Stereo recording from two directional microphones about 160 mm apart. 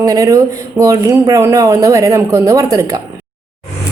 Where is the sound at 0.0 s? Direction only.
20° right (ahead or behind).